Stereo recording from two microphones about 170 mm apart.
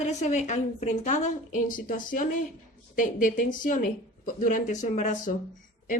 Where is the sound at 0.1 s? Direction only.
45° left (ahead or behind).